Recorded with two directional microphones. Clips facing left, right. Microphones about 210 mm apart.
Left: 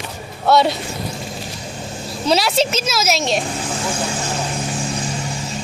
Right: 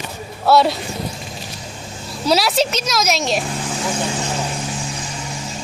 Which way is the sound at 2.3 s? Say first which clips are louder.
Even; centre (ahead or behind).